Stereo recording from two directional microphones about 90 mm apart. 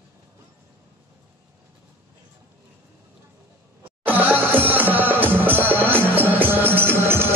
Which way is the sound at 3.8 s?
20° right (ahead or behind).